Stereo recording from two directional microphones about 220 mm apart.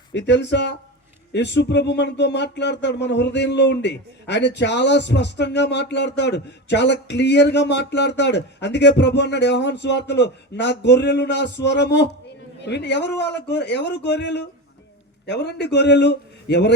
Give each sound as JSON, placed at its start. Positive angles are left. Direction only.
{"t": 0.1, "sound": "speech", "side_deg": 50}